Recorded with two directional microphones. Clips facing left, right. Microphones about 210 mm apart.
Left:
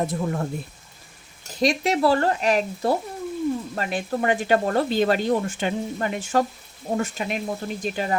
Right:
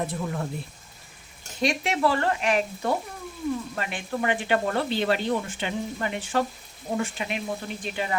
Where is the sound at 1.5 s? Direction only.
35° left (ahead or behind).